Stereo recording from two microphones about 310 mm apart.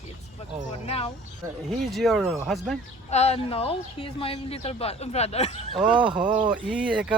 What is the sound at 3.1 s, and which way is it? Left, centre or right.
A woman's voice, centre.